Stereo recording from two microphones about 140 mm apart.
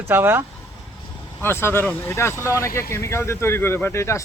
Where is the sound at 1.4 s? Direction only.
15° left (ahead or behind).